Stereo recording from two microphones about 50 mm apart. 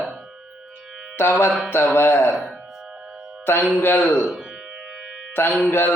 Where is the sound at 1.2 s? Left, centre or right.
Left.